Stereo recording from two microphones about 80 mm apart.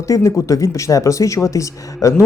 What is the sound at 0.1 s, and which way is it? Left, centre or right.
Speech, left.